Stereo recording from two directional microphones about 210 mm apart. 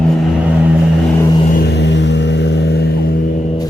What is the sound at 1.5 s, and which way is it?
Vehicle, 50° left (ahead or behind).